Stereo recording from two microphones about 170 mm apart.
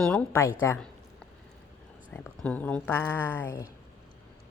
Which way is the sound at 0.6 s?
15° left (ahead or behind).